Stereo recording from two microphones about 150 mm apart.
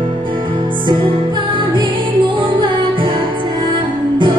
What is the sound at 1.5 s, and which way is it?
Music, 35° right (ahead or behind).